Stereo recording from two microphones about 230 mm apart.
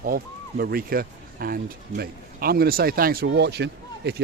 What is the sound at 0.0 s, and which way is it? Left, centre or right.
Speech, right.